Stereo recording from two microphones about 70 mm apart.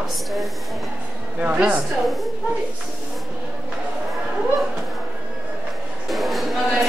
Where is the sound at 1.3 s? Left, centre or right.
Centre.